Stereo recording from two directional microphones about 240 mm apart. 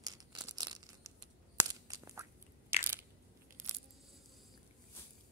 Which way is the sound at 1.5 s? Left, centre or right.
Centre.